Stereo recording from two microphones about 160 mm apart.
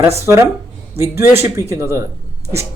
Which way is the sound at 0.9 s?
15° right (ahead or behind).